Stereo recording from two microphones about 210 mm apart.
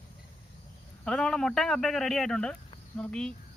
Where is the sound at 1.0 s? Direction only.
5° left (ahead or behind).